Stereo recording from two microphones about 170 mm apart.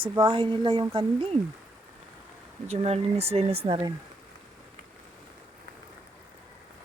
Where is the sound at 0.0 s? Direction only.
30° right (ahead or behind).